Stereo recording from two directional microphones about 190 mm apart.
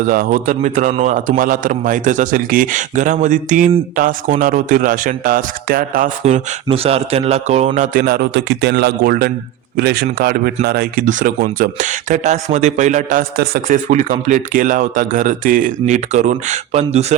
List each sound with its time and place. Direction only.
0.0 s speech: 50° right (ahead or behind)
6.2 s a man's voice: 35° right (ahead or behind); by 13.7 s 55° right (ahead or behind)
13.9 s speech: 40° right (ahead or behind)